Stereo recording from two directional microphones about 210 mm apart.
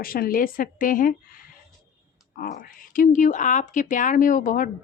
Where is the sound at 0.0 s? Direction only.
45° left (ahead or behind).